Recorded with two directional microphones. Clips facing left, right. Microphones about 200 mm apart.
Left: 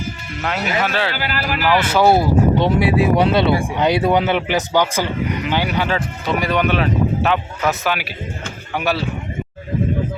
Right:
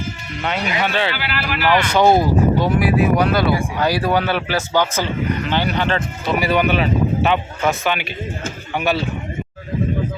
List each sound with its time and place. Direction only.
0.4 s speech: centre (ahead or behind)
1.1 s speech: 45° left (ahead or behind)
1.7 s speech: 5° left (ahead or behind)
2.6 s speech: 25° left (ahead or behind); by 6.3 s 10° left (ahead or behind)
6.4 s speech: 5° right (ahead or behind)